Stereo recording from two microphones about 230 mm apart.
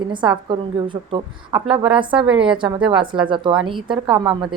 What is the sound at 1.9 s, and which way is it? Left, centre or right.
Speech, right.